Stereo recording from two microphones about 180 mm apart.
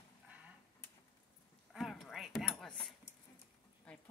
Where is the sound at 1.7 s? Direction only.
Centre (ahead or behind).